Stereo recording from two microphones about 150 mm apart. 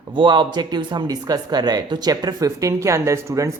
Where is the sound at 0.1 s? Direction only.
30° right (ahead or behind).